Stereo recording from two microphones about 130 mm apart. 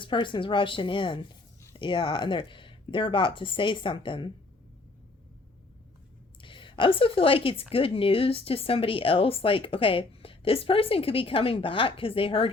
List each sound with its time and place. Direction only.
0.0 s speech: 40° left (ahead or behind)
6.4 s a woman's voice: 40° left (ahead or behind)